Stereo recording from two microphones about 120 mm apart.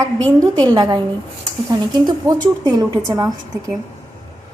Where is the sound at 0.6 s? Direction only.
35° right (ahead or behind).